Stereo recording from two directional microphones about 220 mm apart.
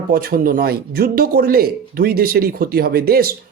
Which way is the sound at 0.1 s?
40° right (ahead or behind).